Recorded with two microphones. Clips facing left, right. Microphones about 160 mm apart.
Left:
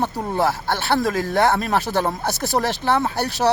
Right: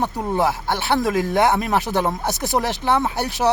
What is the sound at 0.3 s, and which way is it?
Speech, 15° right (ahead or behind).